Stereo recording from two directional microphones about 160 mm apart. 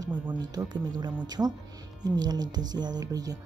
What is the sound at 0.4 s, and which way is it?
Speech, 25° right (ahead or behind).